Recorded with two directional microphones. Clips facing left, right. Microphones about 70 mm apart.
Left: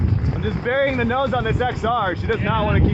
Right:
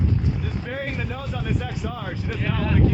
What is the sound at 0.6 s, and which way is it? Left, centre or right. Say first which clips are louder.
Speech: left 11 dB; left.